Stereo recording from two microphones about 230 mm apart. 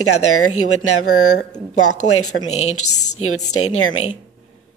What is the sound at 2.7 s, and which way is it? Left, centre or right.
A woman's voice, left.